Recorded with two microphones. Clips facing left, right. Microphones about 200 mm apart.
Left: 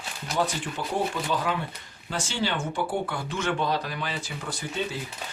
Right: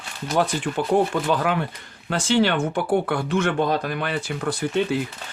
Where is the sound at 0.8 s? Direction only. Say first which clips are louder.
Right 8 dB; 60° right (ahead or behind).